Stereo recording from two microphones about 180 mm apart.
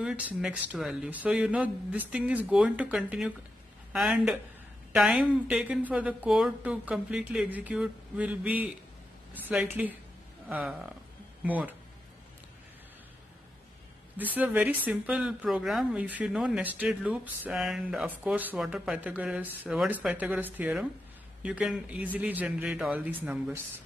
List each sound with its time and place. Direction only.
0.0 s a woman's voice: 5° right (ahead or behind)
14.1 s speech: 10° right (ahead or behind)